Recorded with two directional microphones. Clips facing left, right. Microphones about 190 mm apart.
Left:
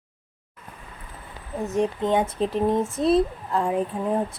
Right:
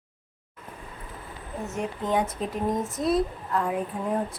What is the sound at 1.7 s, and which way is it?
A woman's voice, 25° left (ahead or behind).